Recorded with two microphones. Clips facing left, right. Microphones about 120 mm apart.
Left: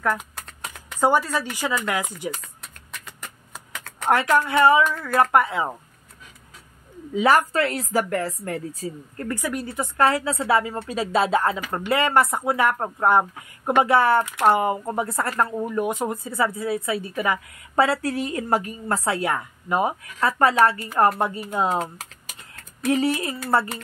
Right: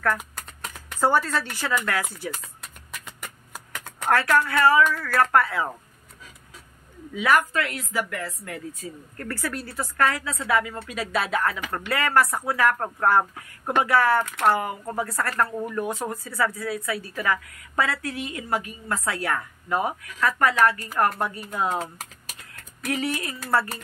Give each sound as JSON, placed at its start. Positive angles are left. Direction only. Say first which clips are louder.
{"t": 1.0, "sound": "speech", "louder": "left 2 dB", "side_deg": 15}
{"t": 2.3, "sound": "a sound", "louder": "even", "side_deg": -5}
{"t": 4.1, "sound": "speech", "louder": "left 2 dB", "side_deg": 20}
{"t": 7.2, "sound": "a woman's voice", "louder": "left 3 dB", "side_deg": 30}
{"t": 9.3, "sound": "speech", "louder": "left 3 dB", "side_deg": 15}
{"t": 22.8, "sound": "speech", "louder": "left 6 dB", "side_deg": 30}